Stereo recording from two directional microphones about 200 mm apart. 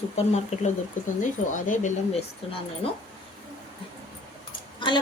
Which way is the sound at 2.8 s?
30° left (ahead or behind).